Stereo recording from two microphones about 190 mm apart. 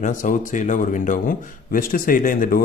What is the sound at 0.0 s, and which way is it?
Speech, 40° left (ahead or behind).